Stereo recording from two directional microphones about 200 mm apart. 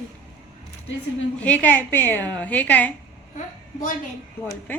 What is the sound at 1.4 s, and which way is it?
A woman's voice, 5° left (ahead or behind).